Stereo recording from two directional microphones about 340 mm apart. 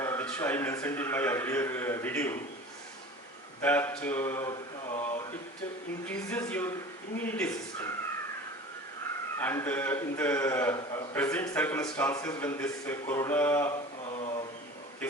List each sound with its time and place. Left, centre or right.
0.0 s a man's voice: centre
3.6 s a man's voice: centre
6.1 s speech: centre
9.4 s a man's voice: centre
14.2 s mantra: centre